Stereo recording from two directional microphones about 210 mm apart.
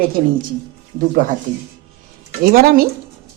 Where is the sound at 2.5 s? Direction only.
45° right (ahead or behind).